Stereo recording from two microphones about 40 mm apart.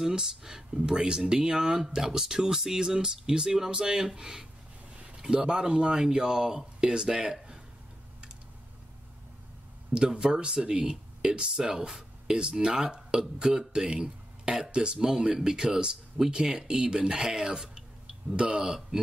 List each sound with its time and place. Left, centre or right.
0.0 s speech: centre
0.7 s speech: right
4.9 s a sound: right
5.2 s speech: right
10.0 s speech: centre